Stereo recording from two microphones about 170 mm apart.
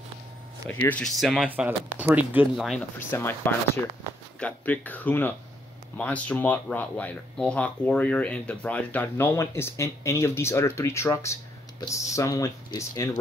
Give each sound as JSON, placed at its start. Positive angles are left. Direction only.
{"t": 0.7, "sound": "speech", "side_deg": 10}
{"t": 3.0, "sound": "speech", "side_deg": 15}